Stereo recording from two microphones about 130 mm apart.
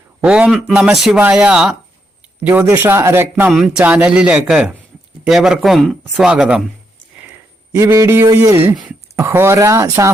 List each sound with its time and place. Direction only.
0.3 s speech: 5° right (ahead or behind)
3.5 s a man's voice: 5° right (ahead or behind)
7.2 s speech: 15° right (ahead or behind)